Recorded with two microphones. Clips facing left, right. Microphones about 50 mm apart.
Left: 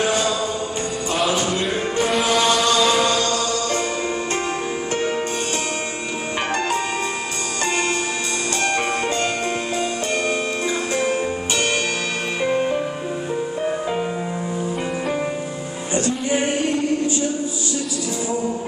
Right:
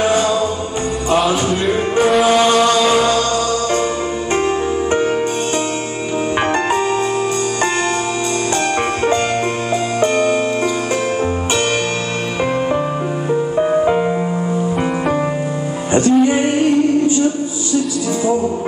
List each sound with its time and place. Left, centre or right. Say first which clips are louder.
1.7 s music: right 7 dB; centre
2.2 s mantra: right 6 dB; right
8.7 s music: right 5 dB; right
12.4 s music: right 3 dB; right
15.9 s music: right 9 dB; right